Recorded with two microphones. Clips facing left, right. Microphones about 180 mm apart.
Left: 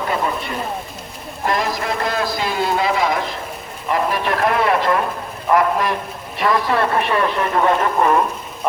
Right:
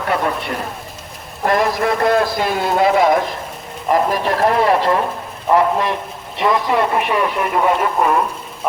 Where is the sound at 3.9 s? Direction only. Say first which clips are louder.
Right 3 dB; 40° right (ahead or behind).